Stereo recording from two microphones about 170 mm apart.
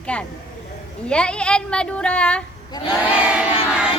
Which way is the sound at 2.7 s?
25° left (ahead or behind).